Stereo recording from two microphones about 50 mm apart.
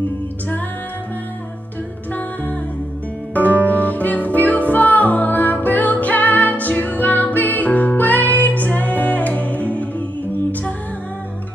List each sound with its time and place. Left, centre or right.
3.6 s music: left